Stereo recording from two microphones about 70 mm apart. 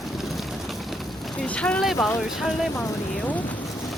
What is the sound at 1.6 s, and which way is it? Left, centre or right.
Speech, centre.